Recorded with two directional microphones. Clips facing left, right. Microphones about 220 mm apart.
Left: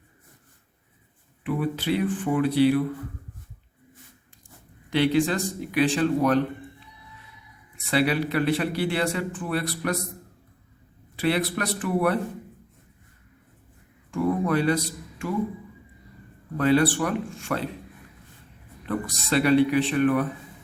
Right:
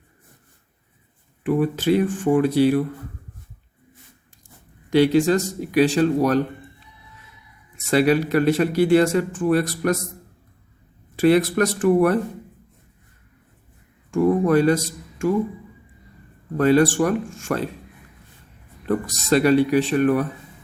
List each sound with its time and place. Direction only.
1.5 s speech: 45° right (ahead or behind)
4.9 s speech: 40° right (ahead or behind)
7.9 s speech: 45° right (ahead or behind)
11.2 s speech: 45° right (ahead or behind)
14.1 s speech: 45° right (ahead or behind)
16.6 s speech: 45° right (ahead or behind)
18.9 s speech: 45° right (ahead or behind)